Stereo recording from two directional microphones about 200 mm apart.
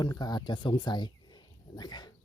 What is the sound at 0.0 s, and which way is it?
Speech, 20° left (ahead or behind).